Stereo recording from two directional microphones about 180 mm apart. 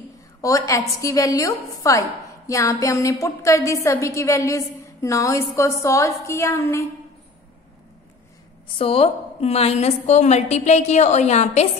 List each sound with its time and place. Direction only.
0.4 s a woman's voice: 20° left (ahead or behind)
8.7 s a woman's voice: 30° left (ahead or behind)